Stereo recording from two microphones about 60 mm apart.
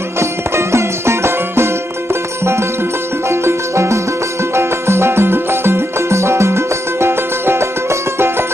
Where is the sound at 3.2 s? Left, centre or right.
Right.